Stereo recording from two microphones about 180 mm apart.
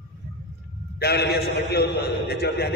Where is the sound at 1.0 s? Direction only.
65° left (ahead or behind).